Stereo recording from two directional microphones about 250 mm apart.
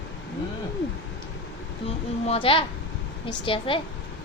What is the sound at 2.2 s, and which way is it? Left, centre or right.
A woman's voice, left.